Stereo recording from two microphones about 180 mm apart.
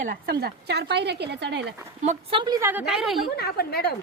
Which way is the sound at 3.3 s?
60° left (ahead or behind).